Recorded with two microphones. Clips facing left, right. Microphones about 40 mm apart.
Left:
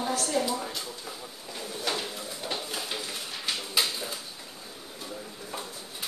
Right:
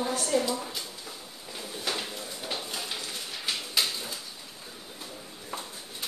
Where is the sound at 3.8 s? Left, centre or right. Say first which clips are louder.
Left 1 dB; centre.